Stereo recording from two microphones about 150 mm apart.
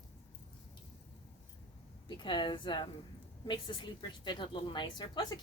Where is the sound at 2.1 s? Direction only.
30° left (ahead or behind).